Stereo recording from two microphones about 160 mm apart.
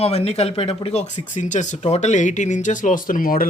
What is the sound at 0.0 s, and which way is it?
Speech, 40° left (ahead or behind).